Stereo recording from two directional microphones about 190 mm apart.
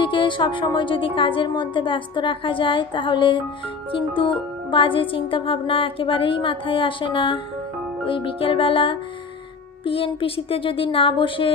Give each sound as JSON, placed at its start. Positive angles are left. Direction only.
{"t": 0.0, "sound": "a woman's voice", "side_deg": 25}